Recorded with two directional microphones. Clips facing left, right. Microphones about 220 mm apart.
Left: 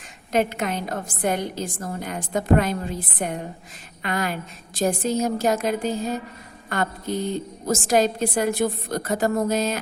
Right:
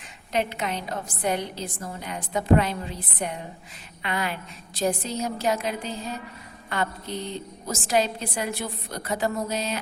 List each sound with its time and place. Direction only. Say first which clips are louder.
0.3 s a woman's voice: left 4 dB; 50° left (ahead or behind)